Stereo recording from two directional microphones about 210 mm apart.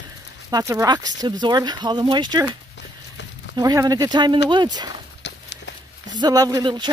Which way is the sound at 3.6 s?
15° right (ahead or behind).